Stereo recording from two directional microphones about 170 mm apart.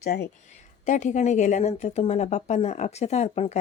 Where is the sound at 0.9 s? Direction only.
45° left (ahead or behind).